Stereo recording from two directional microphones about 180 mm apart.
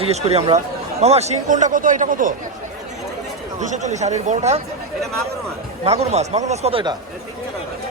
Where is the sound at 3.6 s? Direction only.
40° right (ahead or behind).